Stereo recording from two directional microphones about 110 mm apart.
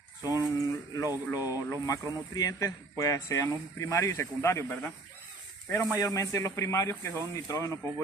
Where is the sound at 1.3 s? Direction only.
35° left (ahead or behind).